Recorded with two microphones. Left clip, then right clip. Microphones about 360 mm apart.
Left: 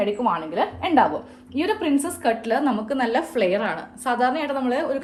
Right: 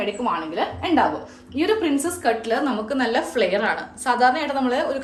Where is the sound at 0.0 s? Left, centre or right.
Centre.